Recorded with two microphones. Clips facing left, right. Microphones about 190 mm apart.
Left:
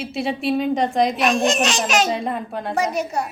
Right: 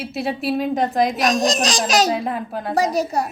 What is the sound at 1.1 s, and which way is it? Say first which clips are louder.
Speech: even; 40° right (ahead or behind).